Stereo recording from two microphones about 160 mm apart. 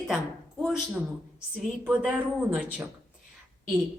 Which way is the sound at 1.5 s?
10° right (ahead or behind).